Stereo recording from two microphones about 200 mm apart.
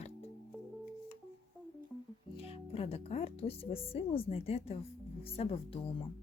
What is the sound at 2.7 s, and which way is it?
Speech, 30° left (ahead or behind).